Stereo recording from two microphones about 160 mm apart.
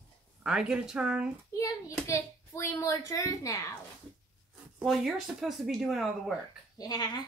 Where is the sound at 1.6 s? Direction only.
20° left (ahead or behind).